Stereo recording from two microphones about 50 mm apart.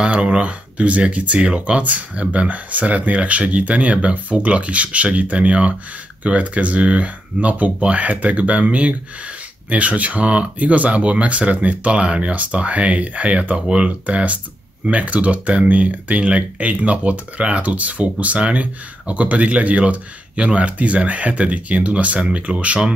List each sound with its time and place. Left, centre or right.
0.0 s speech: centre